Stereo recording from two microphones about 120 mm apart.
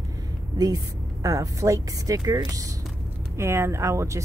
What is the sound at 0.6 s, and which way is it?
Speech, 30° right (ahead or behind).